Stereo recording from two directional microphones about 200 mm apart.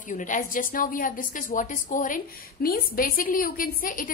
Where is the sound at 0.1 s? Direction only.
40° left (ahead or behind).